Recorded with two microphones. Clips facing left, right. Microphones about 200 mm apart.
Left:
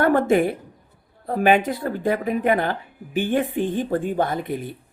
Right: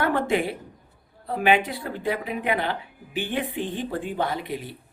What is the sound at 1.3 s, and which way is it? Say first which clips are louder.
Speech: left 4 dB; 45° left (ahead or behind).